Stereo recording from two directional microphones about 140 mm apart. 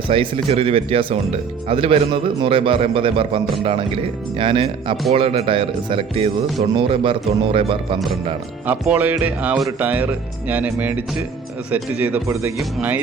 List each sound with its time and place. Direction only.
0.1 s speech: 40° right (ahead or behind)
8.8 s speech: 10° right (ahead or behind)